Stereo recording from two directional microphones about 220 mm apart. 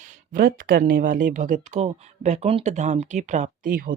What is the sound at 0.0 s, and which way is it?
Speech, 40° right (ahead or behind).